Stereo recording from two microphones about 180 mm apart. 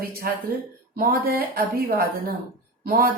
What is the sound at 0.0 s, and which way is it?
A woman's voice, 55° right (ahead or behind).